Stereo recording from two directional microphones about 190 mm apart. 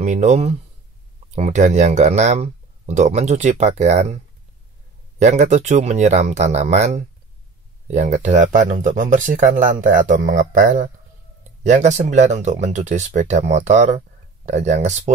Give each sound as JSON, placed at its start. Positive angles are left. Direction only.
{"t": 0.0, "sound": "speech", "side_deg": -40}
{"t": 5.2, "sound": "speech", "side_deg": -35}